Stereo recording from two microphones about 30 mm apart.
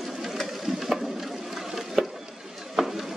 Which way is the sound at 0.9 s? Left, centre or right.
Centre.